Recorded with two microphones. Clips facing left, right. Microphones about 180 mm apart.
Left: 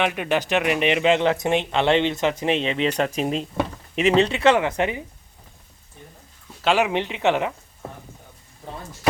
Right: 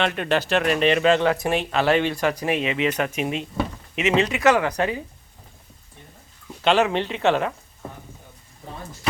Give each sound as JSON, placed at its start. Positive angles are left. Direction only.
{"t": 0.0, "sound": "speech", "side_deg": 10}
{"t": 6.6, "sound": "speech", "side_deg": 10}